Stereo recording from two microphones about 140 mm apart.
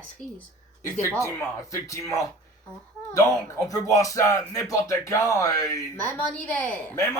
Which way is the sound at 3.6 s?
25° left (ahead or behind).